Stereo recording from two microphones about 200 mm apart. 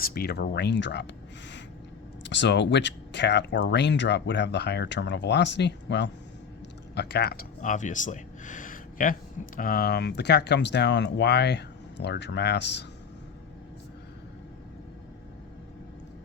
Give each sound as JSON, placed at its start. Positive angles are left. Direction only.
{"t": 0.0, "sound": "speech", "side_deg": 50}
{"t": 2.2, "sound": "speech", "side_deg": 60}